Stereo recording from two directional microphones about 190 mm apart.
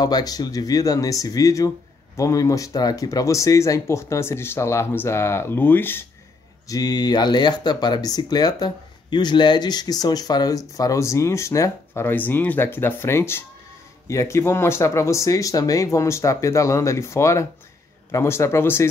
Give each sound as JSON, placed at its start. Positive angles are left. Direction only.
{"t": 0.0, "sound": "speech", "side_deg": 20}